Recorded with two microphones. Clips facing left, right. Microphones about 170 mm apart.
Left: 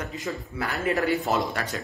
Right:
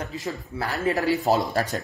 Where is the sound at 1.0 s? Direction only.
35° right (ahead or behind).